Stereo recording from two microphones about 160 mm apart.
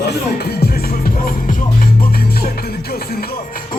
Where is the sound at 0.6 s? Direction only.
65° left (ahead or behind).